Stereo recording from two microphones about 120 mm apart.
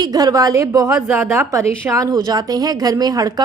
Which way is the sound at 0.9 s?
10° right (ahead or behind).